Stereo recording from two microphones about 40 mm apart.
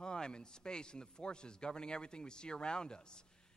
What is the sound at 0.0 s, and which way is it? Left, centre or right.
A man's voice, left.